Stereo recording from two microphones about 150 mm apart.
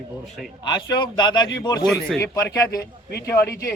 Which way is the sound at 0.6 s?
30° left (ahead or behind).